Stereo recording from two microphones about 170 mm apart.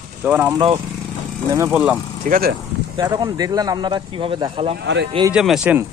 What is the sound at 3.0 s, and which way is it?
Speech, 20° right (ahead or behind).